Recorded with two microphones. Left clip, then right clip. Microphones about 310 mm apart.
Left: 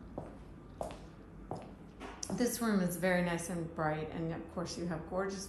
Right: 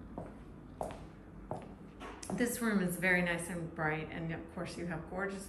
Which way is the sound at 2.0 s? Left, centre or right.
Centre.